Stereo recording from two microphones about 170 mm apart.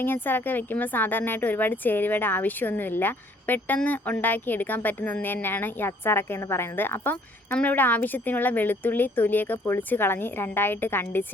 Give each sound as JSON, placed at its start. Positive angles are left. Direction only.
{"t": 0.0, "sound": "speech", "side_deg": 10}